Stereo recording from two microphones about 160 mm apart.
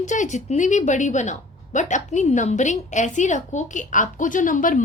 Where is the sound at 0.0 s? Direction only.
50° left (ahead or behind).